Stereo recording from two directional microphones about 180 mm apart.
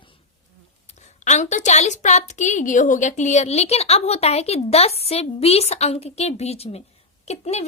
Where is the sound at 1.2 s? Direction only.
40° left (ahead or behind).